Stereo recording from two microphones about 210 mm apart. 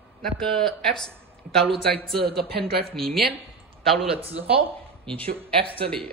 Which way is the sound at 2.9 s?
Centre (ahead or behind).